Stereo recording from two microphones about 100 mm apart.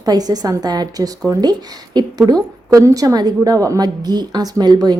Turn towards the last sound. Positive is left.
turn(degrees=-40)  # may be behind; listen again after turning